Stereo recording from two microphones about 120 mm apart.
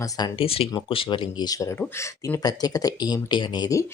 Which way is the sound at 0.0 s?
30° left (ahead or behind).